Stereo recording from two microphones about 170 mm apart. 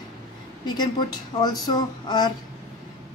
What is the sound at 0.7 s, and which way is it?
A woman's voice, 25° left (ahead or behind).